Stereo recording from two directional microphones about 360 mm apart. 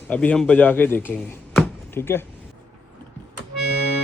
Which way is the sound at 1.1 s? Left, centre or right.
Centre.